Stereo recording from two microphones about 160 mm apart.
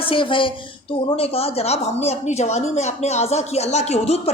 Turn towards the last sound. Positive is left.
turn(degrees=40)  # may be behind; listen again after turning